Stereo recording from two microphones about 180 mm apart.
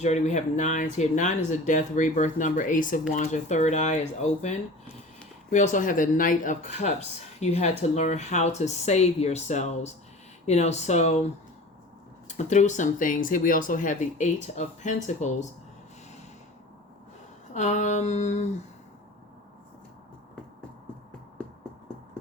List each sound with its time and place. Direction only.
0.0 s speech: 40° left (ahead or behind)
12.3 s speech: 40° left (ahead or behind)
17.5 s speech: 45° left (ahead or behind)